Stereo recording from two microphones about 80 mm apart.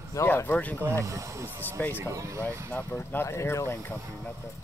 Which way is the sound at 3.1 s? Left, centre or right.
Left.